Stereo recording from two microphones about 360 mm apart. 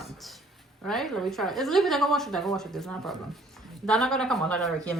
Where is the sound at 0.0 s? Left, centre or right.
Centre.